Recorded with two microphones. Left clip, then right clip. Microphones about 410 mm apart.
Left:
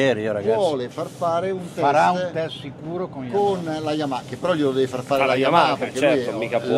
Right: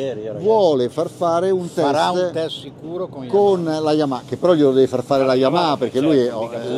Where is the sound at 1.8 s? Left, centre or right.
Right.